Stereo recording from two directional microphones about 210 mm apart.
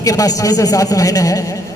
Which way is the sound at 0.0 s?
15° left (ahead or behind).